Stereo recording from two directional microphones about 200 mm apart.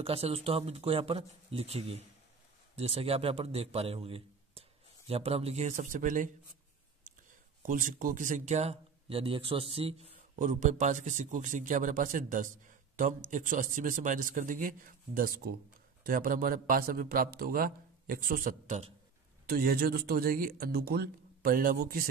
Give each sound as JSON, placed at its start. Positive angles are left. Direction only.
{"t": 0.0, "sound": "a man's voice", "side_deg": -30}
{"t": 7.6, "sound": "a man's voice", "side_deg": -45}